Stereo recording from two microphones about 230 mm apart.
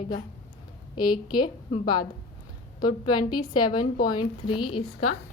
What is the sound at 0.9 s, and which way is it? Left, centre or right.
A woman's voice, centre.